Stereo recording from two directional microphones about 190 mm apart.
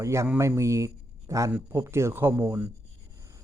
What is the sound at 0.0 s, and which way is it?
A man's voice, 15° right (ahead or behind).